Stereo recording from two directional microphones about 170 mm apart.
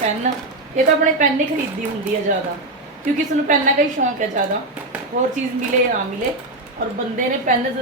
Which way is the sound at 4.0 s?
60° right (ahead or behind).